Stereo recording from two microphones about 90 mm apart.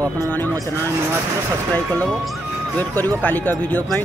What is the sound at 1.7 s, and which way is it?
Speech, 20° left (ahead or behind).